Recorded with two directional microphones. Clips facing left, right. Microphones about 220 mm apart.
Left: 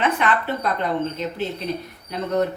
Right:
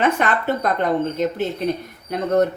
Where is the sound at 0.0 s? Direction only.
45° right (ahead or behind).